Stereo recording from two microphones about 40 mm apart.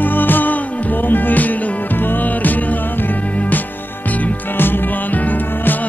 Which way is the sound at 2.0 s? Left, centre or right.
Left.